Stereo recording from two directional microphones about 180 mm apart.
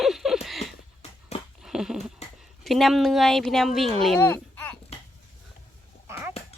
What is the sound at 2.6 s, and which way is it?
A woman's voice, centre (ahead or behind).